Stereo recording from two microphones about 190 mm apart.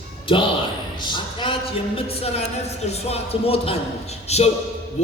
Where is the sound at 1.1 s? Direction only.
25° left (ahead or behind).